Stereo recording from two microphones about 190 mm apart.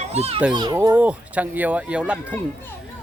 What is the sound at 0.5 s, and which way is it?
Speech, 20° right (ahead or behind).